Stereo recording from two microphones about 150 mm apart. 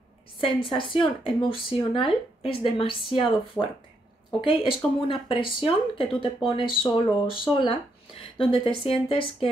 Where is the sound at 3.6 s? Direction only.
5° right (ahead or behind).